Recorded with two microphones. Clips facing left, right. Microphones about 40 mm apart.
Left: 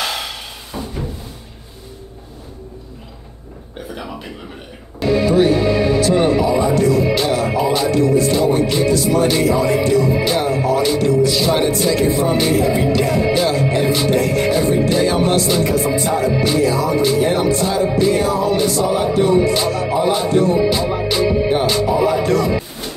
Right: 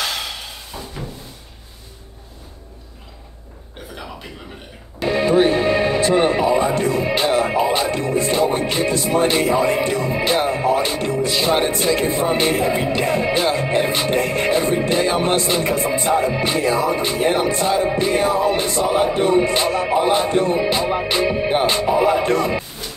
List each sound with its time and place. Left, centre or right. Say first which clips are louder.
0.0 s a sound: left 2 dB; centre
5.0 s speech: left 2 dB; right
14.8 s music: left 3 dB; right